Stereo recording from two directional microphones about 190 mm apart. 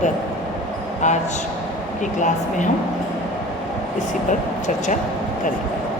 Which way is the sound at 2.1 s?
40° left (ahead or behind).